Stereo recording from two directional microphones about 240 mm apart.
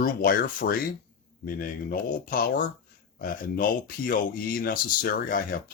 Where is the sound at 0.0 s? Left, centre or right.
Left.